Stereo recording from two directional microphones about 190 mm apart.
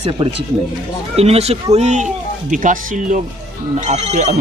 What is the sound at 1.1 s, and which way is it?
Speech, 35° right (ahead or behind).